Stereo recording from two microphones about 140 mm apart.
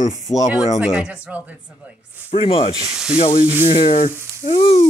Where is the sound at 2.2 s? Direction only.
45° left (ahead or behind).